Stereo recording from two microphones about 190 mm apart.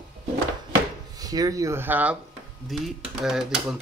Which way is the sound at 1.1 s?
20° right (ahead or behind).